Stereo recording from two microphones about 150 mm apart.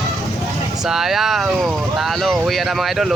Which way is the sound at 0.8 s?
5° right (ahead or behind).